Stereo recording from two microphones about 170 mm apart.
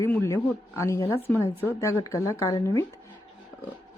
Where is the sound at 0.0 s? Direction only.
15° left (ahead or behind).